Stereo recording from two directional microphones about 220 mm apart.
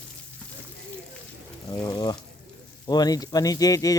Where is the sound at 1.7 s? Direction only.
15° left (ahead or behind).